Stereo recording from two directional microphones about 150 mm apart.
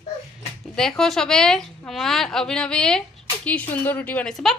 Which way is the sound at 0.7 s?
5° left (ahead or behind).